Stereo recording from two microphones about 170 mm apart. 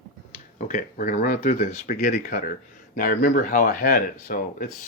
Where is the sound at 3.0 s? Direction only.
55° left (ahead or behind).